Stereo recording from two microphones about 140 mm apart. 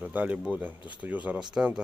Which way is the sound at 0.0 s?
10° right (ahead or behind).